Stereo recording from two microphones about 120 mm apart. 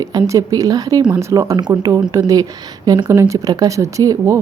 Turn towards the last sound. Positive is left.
turn(degrees=-25)  # may be behind; listen again after turning